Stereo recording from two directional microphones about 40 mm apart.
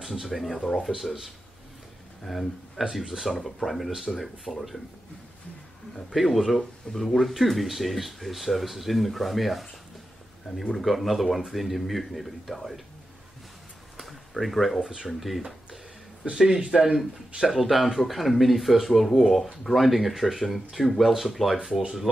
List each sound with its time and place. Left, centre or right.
0.0 s speech: centre
2.3 s speech: centre
4.5 s speech: left
6.1 s speech: centre
10.7 s speech: centre
14.4 s speech: centre
14.8 s speech: centre
15.1 s speech: centre
16.5 s speech: right
16.8 s speech: centre